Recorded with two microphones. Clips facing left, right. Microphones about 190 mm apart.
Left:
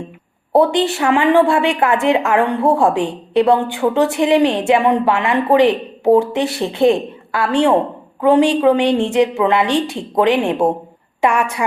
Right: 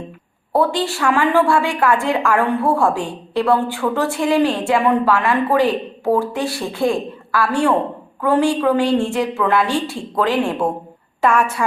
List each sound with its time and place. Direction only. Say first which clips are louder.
0.5 s a woman's voice: left 4 dB; 20° left (ahead or behind)